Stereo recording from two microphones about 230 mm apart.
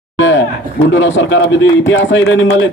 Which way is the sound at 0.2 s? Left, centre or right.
Left.